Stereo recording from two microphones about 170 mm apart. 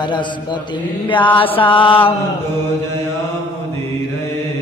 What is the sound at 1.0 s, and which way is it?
Mantra, 30° left (ahead or behind).